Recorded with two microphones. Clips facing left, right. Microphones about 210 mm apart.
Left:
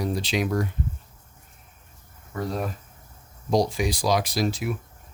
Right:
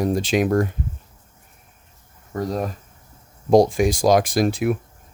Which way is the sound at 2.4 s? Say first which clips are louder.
Right 4 dB; 40° right (ahead or behind).